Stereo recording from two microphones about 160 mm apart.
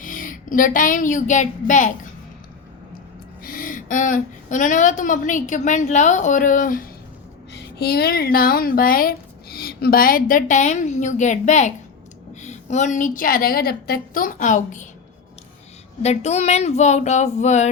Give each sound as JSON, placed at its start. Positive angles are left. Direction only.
{"t": 0.0, "sound": "a woman's voice", "side_deg": 55}
{"t": 3.4, "sound": "a woman's voice", "side_deg": 60}
{"t": 7.5, "sound": "speech", "side_deg": 85}
{"t": 16.0, "sound": "a woman's voice", "side_deg": 45}